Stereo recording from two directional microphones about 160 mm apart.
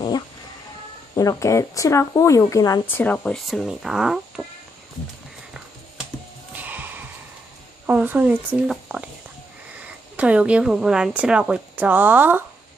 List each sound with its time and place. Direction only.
1.1 s speech: 20° left (ahead or behind); by 4.4 s 5° right (ahead or behind)
6.5 s music: 10° right (ahead or behind)
7.9 s speech: 10° right (ahead or behind)
10.2 s speech: 5° right (ahead or behind)